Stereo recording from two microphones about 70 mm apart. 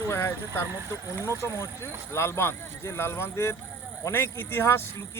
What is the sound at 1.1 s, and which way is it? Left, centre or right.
Speech, right.